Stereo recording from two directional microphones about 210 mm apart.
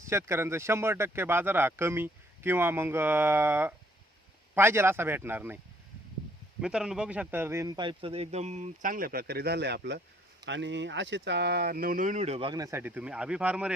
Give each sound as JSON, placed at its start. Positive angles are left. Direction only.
{"t": 0.1, "sound": "speech", "side_deg": -10}
{"t": 6.6, "sound": "speech", "side_deg": -5}